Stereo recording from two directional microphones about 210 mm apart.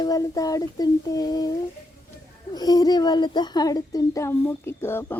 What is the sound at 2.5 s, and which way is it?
A woman's voice, 20° left (ahead or behind).